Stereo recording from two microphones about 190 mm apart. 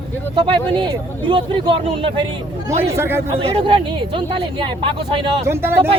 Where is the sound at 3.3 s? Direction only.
30° right (ahead or behind).